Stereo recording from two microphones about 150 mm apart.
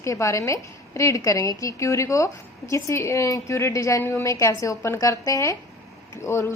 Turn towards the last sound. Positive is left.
turn(degrees=20)  # may be behind; listen again after turning